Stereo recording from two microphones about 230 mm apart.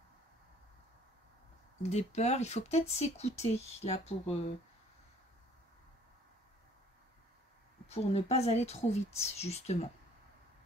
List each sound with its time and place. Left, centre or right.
1.8 s speech: left
7.9 s speech: left